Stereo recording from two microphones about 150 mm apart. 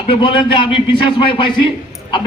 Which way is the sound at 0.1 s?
30° left (ahead or behind).